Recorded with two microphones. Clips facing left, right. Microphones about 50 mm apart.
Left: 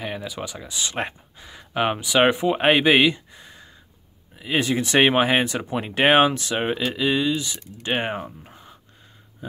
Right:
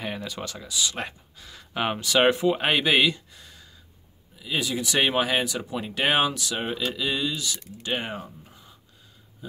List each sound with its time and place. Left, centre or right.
0.0 s speech: centre
0.7 s speech: left
4.4 s speech: left